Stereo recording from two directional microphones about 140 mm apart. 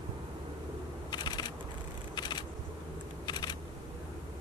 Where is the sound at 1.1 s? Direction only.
30° left (ahead or behind).